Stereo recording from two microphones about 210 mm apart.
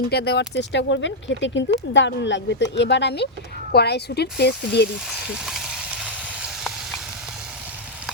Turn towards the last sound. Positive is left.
turn(degrees=0)  # may be behind; listen again after turning